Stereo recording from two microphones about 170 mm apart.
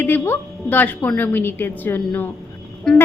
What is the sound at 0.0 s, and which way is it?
A woman's voice, 10° left (ahead or behind).